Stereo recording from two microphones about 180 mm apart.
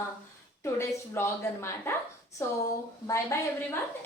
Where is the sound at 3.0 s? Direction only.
15° left (ahead or behind).